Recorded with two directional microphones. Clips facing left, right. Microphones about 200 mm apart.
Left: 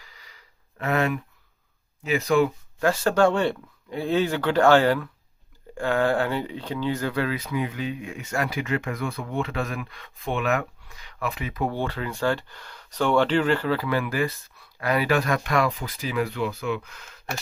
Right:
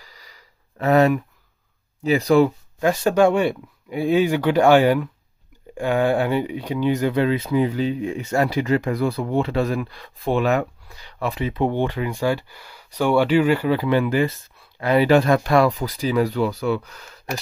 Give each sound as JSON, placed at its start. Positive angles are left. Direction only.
{"t": 0.0, "sound": "a sound", "side_deg": -40}
{"t": 2.0, "sound": "speech", "side_deg": -35}
{"t": 2.8, "sound": "speech", "side_deg": -15}